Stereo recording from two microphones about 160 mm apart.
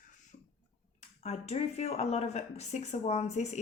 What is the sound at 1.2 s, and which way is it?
Speech, 40° left (ahead or behind).